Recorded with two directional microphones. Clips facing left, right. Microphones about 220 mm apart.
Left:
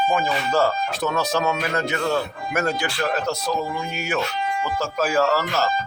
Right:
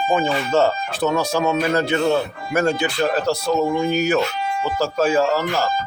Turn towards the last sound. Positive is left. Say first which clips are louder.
# right 2 dB
turn(degrees=-15)  # may be behind; listen again after turning